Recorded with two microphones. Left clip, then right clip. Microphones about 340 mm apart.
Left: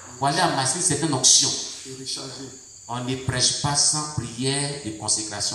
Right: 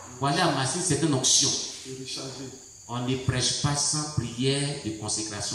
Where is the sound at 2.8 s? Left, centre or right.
Centre.